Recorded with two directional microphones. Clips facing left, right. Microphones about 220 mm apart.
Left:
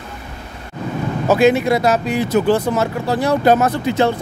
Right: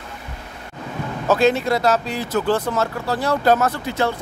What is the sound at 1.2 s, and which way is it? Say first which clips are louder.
Speech: left 4 dB; 10° left (ahead or behind).